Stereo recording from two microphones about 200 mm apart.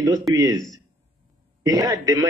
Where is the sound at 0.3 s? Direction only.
20° right (ahead or behind).